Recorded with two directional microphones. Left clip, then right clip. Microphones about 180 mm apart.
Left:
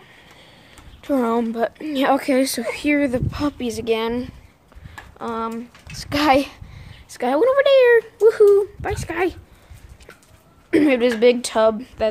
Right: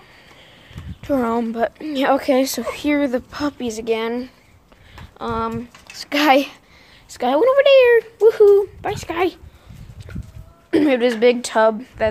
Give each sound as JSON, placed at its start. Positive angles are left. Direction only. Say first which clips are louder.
{"t": 1.0, "sound": "a woman's voice", "louder": "even", "side_deg": 0}
{"t": 5.2, "sound": "speech", "louder": "right 3 dB", "side_deg": -15}
{"t": 5.9, "sound": "speech", "louder": "right 2 dB", "side_deg": -5}
{"t": 10.7, "sound": "a woman's voice", "louder": "even", "side_deg": 5}